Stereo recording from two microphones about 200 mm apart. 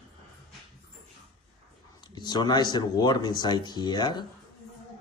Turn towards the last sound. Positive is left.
turn(degrees=20)  # may be behind; listen again after turning